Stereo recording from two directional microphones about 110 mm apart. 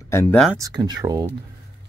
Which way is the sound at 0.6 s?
35° right (ahead or behind).